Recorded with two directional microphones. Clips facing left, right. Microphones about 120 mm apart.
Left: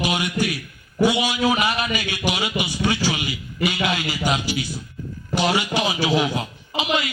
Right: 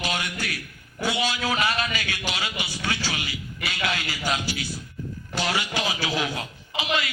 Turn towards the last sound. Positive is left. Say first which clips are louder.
# left 4 dB
turn(degrees=20)  # may be behind; listen again after turning